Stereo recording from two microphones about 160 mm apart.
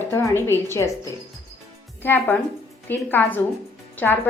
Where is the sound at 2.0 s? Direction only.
10° left (ahead or behind).